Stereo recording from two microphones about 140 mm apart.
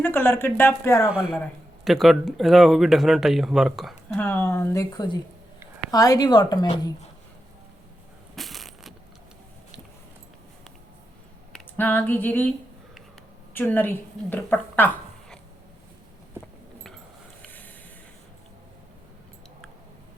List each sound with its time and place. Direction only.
0.0 s a woman's voice: 15° left (ahead or behind)
1.1 s speech: 5° right (ahead or behind)
4.1 s a woman's voice: 15° left (ahead or behind)
8.4 s crushing: centre (ahead or behind)
11.8 s a woman's voice: 15° left (ahead or behind)
13.5 s a woman's voice: 15° left (ahead or behind)